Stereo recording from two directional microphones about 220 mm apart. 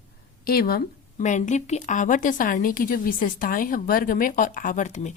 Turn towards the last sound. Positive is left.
turn(degrees=30)  # may be behind; listen again after turning